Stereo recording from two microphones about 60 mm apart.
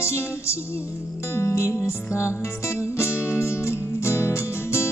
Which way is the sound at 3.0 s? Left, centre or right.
Left.